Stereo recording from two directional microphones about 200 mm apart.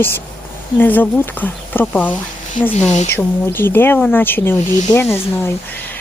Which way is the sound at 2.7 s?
35° left (ahead or behind).